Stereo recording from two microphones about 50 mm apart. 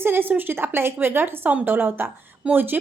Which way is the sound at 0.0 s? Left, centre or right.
Right.